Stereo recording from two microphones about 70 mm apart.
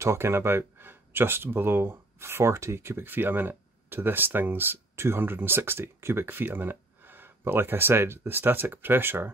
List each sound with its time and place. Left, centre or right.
0.0 s speech: right